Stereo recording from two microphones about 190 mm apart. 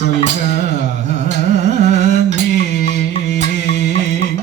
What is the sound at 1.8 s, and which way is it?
Carnatic music, 40° right (ahead or behind).